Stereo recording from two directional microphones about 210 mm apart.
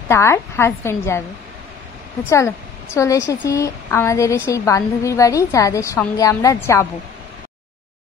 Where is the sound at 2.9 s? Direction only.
15° left (ahead or behind).